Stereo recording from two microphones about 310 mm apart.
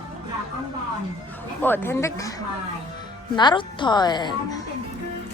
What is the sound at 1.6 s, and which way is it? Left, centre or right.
A woman's voice, centre.